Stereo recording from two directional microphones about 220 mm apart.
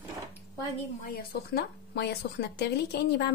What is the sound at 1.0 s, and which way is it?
A woman's voice, 45° left (ahead or behind).